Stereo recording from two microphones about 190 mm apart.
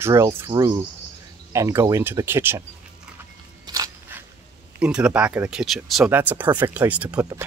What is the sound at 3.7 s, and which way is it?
Biting, 15° right (ahead or behind).